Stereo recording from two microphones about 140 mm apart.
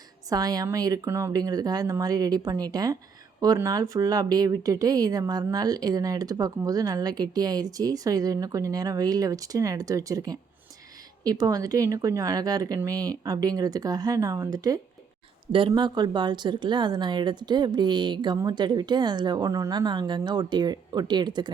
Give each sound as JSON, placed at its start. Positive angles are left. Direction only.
{"t": 0.3, "sound": "a woman's voice", "side_deg": -25}